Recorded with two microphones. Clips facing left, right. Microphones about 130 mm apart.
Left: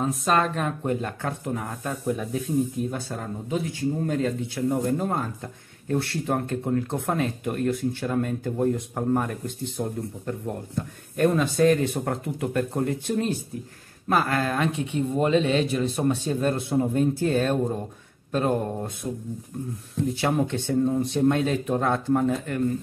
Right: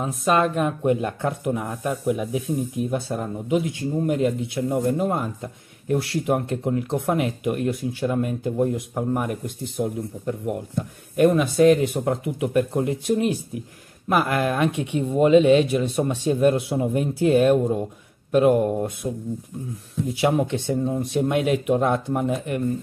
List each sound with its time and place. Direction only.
0.0 s speech: 10° right (ahead or behind)
11.1 s speech: 10° right (ahead or behind)
20.2 s speech: 15° right (ahead or behind)